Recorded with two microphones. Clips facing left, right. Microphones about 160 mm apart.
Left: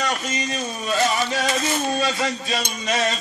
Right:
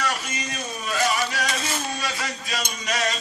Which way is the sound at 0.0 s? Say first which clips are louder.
Left 3 dB; 25° left (ahead or behind).